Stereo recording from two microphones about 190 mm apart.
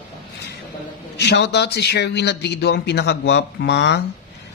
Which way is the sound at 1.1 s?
65° left (ahead or behind).